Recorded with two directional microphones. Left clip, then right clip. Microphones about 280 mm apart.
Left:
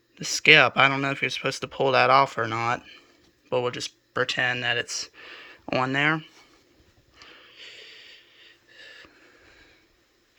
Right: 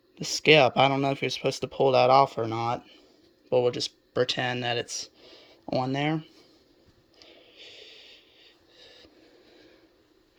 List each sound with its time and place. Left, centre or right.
0.2 s speech: centre
2.5 s speech: left
3.5 s speech: centre
5.2 s a sound: left
5.9 s speech: centre
7.2 s wheeze: centre